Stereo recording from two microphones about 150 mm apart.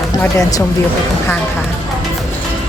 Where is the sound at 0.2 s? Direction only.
20° left (ahead or behind).